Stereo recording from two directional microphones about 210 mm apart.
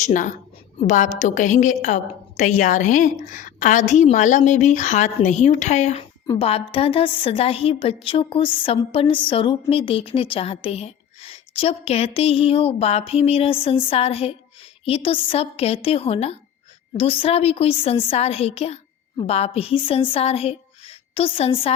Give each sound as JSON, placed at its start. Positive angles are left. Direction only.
{"t": 0.0, "sound": "a woman's voice", "side_deg": 40}